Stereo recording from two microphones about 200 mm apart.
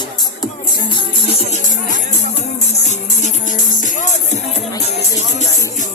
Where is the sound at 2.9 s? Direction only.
35° left (ahead or behind).